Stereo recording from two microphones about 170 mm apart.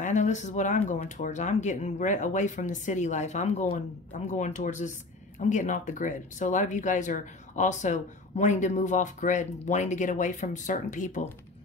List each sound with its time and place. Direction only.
0.0 s speech: 45° left (ahead or behind)